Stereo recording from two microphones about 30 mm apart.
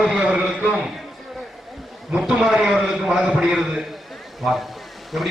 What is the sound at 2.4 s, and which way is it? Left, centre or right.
Speech, right.